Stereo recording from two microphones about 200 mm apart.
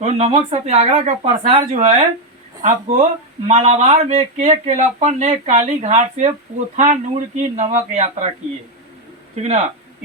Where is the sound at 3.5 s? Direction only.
35° right (ahead or behind).